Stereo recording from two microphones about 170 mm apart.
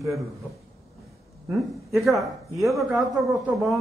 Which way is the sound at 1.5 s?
Centre (ahead or behind).